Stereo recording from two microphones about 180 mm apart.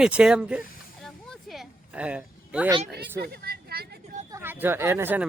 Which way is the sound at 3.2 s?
60° right (ahead or behind).